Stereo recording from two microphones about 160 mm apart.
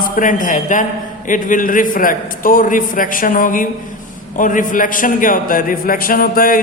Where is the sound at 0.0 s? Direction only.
55° left (ahead or behind).